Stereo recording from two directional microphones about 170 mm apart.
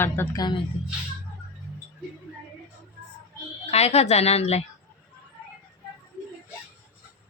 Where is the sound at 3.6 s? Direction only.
40° left (ahead or behind).